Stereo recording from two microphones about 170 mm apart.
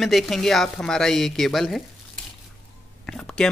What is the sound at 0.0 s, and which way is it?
Speech, centre (ahead or behind).